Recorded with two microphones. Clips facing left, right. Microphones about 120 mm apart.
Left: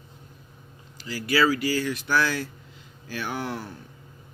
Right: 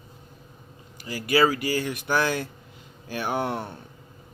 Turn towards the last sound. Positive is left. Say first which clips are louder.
# right 4 dB
turn(degrees=-25)  # may be behind; listen again after turning